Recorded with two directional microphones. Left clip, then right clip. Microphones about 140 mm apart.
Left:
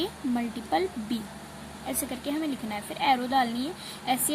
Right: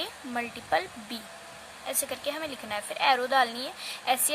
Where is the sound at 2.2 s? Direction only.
50° right (ahead or behind).